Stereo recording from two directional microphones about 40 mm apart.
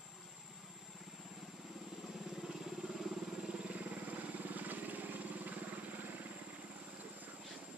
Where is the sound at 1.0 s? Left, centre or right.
Centre.